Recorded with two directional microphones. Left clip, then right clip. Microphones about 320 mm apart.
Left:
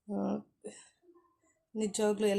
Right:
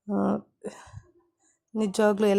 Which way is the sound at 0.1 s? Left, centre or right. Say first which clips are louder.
Right 9 dB; right.